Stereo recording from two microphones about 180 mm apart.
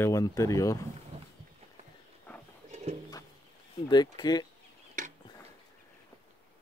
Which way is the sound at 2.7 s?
40° right (ahead or behind).